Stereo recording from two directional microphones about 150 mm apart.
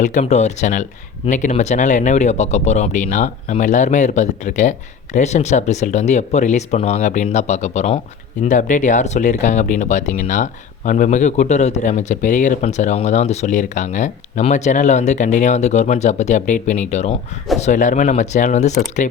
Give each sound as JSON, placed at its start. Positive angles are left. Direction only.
{"t": 0.0, "sound": "speech", "side_deg": 55}